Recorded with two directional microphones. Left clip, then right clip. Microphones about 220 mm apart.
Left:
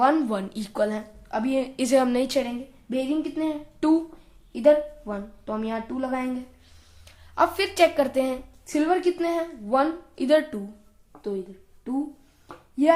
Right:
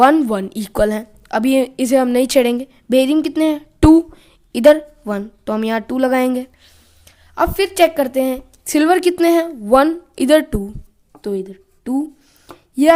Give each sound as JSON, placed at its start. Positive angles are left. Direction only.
{"t": 0.0, "sound": "a woman's voice", "side_deg": -40}
{"t": 7.0, "sound": "a woman's voice", "side_deg": -40}
{"t": 11.9, "sound": "a woman's voice", "side_deg": -55}
{"t": 12.5, "sound": "a sound", "side_deg": -50}